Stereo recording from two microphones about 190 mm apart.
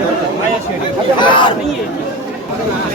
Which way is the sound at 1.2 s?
25° left (ahead or behind).